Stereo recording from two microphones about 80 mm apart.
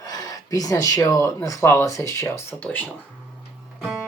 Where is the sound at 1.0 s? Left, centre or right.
Left.